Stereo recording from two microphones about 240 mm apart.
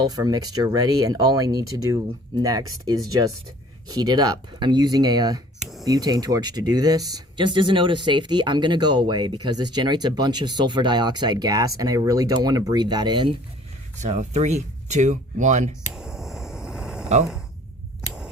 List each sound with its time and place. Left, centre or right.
0.0 s speech: centre
14.0 s speech: right
15.9 s a sound: centre